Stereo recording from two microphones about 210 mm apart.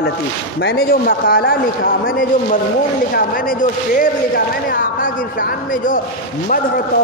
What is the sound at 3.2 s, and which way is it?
Speech, 40° left (ahead or behind).